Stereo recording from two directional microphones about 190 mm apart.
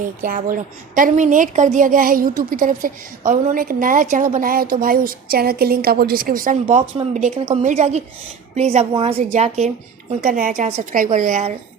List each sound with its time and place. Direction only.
0.2 s a woman's voice: 45° right (ahead or behind)